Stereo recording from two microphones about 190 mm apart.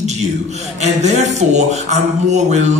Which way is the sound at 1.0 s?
35° right (ahead or behind).